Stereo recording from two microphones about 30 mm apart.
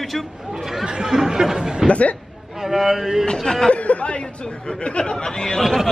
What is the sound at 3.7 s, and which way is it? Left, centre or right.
Speech, left.